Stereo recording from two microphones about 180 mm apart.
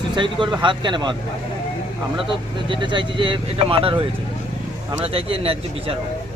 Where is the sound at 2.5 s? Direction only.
25° right (ahead or behind).